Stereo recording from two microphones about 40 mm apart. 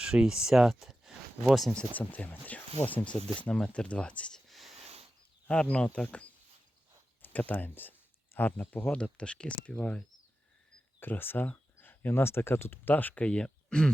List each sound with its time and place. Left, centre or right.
0.0 s speech: right
0.7 s a sound: centre
1.9 s speech: left
3.0 s speech: left
4.4 s a sound: centre
5.5 s speech: left
7.5 s speech: left
9.1 s speech: left
11.0 s speech: left
11.4 s speech: left
13.2 s speech: left